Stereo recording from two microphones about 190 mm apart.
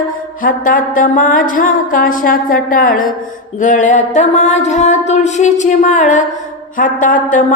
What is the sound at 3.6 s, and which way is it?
Music, 40° left (ahead or behind).